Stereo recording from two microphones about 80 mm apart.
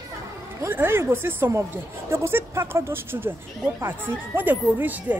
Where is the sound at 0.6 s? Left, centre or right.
Right.